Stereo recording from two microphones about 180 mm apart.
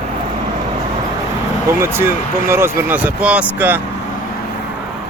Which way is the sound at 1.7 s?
15° right (ahead or behind).